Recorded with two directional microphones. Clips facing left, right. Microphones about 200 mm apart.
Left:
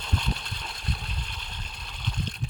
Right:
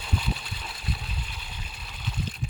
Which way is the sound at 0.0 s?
5° right (ahead or behind).